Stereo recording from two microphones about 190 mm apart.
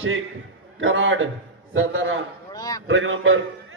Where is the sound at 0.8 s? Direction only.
90° right.